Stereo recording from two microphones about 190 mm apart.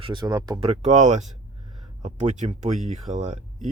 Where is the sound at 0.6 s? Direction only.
35° right (ahead or behind).